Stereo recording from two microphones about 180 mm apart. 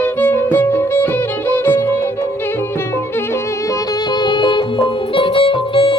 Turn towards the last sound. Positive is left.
turn(degrees=30)  # may be behind; listen again after turning